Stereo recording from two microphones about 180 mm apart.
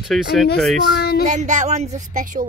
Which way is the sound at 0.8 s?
60° left (ahead or behind).